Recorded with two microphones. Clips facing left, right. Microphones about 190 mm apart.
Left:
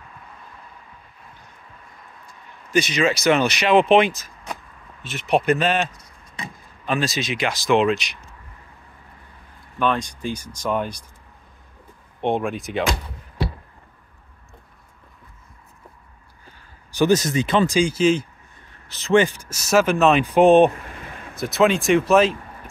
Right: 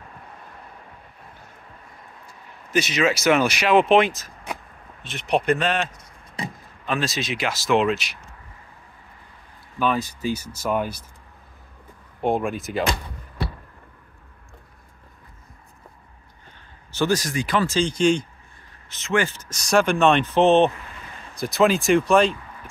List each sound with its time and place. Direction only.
2.7 s speech: 5° right (ahead or behind)
6.9 s speech: centre (ahead or behind)
9.8 s speech: 5° right (ahead or behind)
12.2 s speech: centre (ahead or behind)
16.9 s speech: 20° left (ahead or behind)
17.7 s speech: 5° left (ahead or behind)
18.9 s speech: 35° left (ahead or behind)
19.1 s speech: 15° left (ahead or behind)
21.4 s speech: centre (ahead or behind)